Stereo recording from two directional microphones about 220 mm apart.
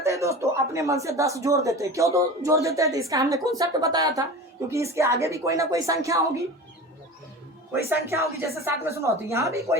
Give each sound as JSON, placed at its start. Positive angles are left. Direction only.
{"t": 0.0, "sound": "speech", "side_deg": -15}
{"t": 8.1, "sound": "speech", "side_deg": -15}